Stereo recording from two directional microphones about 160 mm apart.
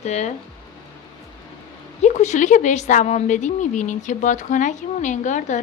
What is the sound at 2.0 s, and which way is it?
A woman's voice, 45° left (ahead or behind).